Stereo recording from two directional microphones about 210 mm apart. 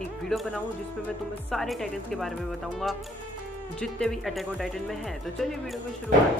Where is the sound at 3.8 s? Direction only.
5° left (ahead or behind).